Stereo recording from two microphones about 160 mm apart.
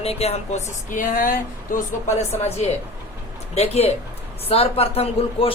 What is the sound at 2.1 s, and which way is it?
Speech, 45° left (ahead or behind).